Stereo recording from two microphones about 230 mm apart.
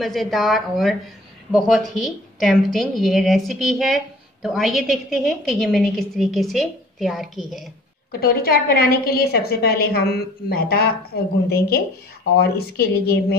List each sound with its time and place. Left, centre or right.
0.0 s a woman's voice: centre
8.1 s a woman's voice: left